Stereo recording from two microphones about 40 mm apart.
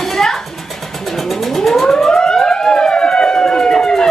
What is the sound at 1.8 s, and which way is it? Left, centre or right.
Siren, centre.